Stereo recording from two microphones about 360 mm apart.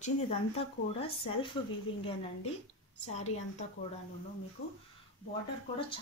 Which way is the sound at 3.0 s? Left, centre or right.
Centre.